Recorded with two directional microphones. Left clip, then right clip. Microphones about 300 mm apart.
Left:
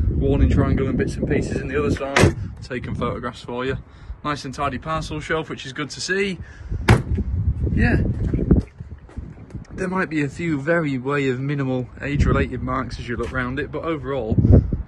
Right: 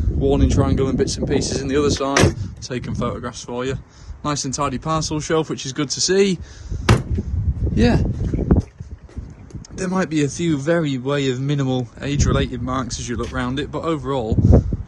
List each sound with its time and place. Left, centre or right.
0.2 s speech: centre
7.7 s a sound: centre
9.8 s a man's voice: centre